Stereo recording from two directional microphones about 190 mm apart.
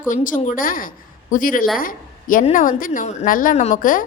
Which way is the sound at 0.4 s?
45° left (ahead or behind).